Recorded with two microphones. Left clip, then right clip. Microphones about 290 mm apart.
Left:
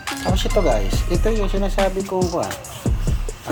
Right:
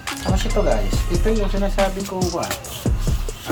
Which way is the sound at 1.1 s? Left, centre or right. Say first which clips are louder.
Even; centre.